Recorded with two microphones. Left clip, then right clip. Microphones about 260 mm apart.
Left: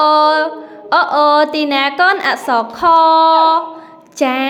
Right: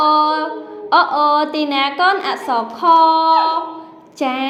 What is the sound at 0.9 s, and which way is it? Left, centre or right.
A woman's voice, left.